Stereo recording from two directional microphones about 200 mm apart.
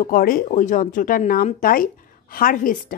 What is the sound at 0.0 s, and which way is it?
A woman's voice, 45° left (ahead or behind).